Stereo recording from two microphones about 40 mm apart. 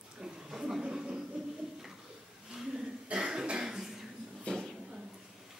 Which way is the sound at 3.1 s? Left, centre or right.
Centre.